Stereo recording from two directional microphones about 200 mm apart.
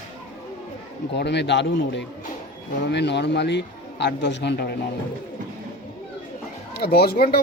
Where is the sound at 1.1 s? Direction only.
60° left (ahead or behind).